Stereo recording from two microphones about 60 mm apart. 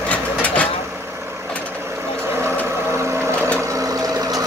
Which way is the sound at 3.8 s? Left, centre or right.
Right.